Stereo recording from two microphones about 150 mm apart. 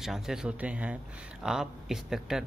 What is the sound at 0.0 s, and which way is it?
Speech, 5° right (ahead or behind).